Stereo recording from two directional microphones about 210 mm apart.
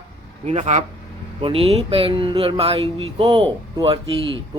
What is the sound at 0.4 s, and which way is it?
Speech, 35° right (ahead or behind).